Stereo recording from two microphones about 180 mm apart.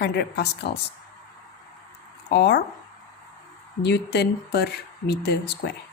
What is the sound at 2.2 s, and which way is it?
Speech, 65° left (ahead or behind).